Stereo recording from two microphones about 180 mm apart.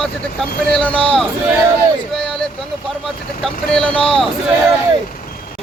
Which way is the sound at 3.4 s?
5° left (ahead or behind).